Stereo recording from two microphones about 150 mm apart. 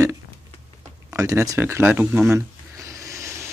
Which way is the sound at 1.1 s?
20° right (ahead or behind).